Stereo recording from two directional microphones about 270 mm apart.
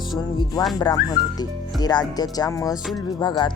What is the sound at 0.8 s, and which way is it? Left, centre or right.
Speech, centre.